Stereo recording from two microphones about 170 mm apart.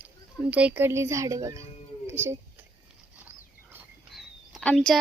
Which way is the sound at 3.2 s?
10° right (ahead or behind).